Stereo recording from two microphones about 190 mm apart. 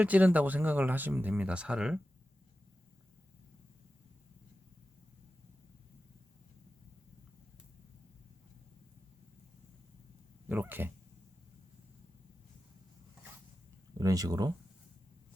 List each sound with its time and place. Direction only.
0.0 s speech: 10° right (ahead or behind)
10.5 s speech: 10° right (ahead or behind)
14.0 s speech: 20° right (ahead or behind)